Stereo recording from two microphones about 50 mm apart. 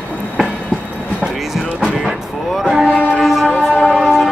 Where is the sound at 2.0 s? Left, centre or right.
Centre.